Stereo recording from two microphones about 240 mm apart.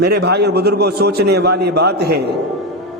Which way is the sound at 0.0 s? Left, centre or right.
Right.